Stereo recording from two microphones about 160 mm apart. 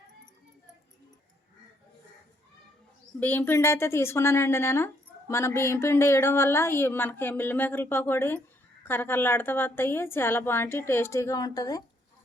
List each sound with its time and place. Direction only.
3.2 s a woman's voice: 10° left (ahead or behind)